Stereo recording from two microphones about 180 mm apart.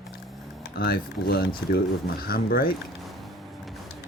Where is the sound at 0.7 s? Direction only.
55° left (ahead or behind).